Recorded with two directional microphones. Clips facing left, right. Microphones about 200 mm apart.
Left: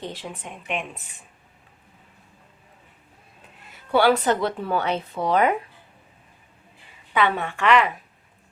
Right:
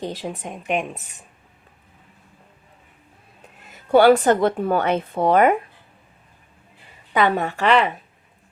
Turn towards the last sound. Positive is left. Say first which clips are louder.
# right 2 dB
turn(degrees=-30)  # may be behind; listen again after turning